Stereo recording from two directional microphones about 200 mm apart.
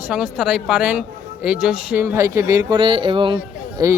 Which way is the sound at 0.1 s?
5° right (ahead or behind).